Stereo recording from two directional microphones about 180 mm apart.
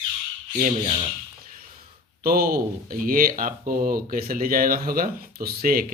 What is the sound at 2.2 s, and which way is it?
Speech, 55° right (ahead or behind).